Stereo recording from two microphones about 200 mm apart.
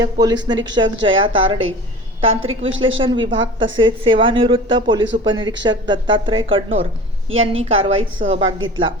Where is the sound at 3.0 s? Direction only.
25° right (ahead or behind).